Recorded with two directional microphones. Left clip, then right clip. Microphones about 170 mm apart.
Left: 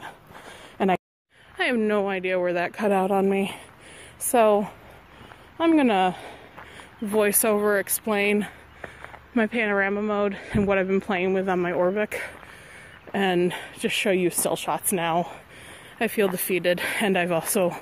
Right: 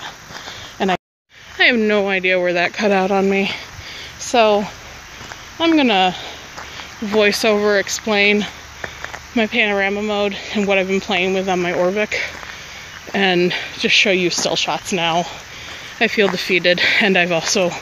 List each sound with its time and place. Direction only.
0.7 s speech: 40° left (ahead or behind)
1.6 s speech: 15° left (ahead or behind)
4.3 s speech: 35° left (ahead or behind)
7.1 s speech: 20° left (ahead or behind)
9.3 s speech: 35° left (ahead or behind)
16.0 s speech: 15° left (ahead or behind)